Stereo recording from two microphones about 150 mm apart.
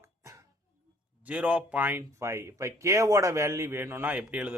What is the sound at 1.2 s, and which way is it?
Speech, 10° right (ahead or behind).